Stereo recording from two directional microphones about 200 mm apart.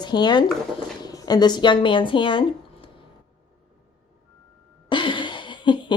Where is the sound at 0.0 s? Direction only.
20° left (ahead or behind).